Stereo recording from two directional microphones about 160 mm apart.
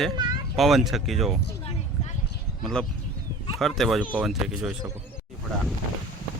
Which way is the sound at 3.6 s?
Centre (ahead or behind).